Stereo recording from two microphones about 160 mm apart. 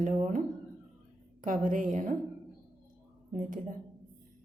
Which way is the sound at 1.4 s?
55° right (ahead or behind).